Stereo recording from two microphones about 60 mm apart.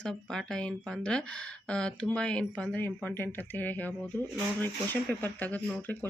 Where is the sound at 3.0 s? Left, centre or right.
Left.